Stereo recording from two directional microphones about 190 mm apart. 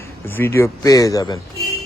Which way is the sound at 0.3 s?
10° left (ahead or behind).